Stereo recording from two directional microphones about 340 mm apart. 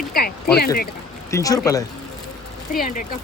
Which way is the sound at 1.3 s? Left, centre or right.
Centre.